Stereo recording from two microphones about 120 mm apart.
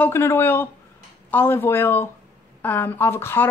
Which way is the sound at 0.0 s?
20° left (ahead or behind).